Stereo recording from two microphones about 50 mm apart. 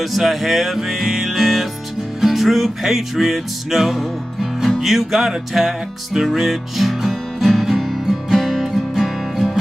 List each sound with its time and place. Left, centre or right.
0.0 s music: centre